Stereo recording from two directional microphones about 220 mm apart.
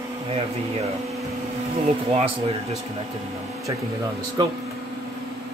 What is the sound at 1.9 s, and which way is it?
Speech, 30° right (ahead or behind).